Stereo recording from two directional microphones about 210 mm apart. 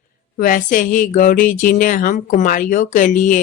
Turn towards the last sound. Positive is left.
turn(degrees=35)  # may be behind; listen again after turning